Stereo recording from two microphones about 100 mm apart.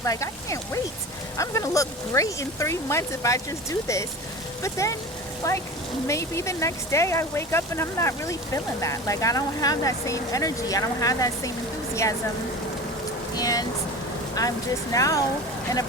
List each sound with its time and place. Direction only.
0.0 s speech: 30° left (ahead or behind)
13.3 s speech: 40° left (ahead or behind)